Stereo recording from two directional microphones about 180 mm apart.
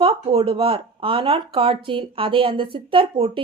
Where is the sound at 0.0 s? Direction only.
30° right (ahead or behind).